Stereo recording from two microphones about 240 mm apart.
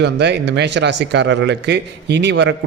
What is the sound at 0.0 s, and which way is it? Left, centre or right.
Speech, right.